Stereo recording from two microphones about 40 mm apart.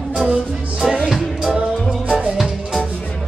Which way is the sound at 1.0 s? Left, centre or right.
Centre.